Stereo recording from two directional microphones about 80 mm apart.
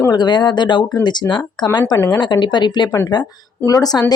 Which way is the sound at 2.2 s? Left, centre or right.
Left.